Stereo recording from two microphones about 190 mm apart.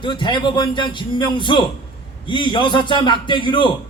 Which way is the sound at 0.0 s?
25° left (ahead or behind).